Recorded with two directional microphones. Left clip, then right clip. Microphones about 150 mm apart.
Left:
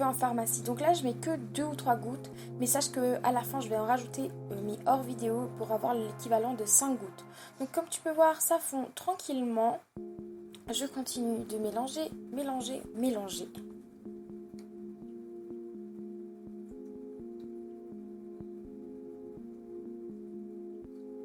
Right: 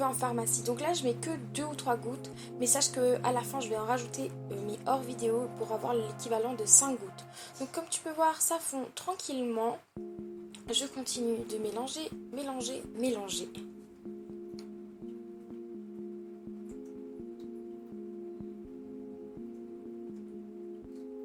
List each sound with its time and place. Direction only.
0.0 s a woman's voice: 45° left (ahead or behind)